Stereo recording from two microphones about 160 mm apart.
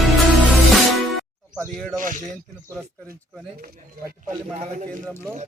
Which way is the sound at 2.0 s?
55° right (ahead or behind).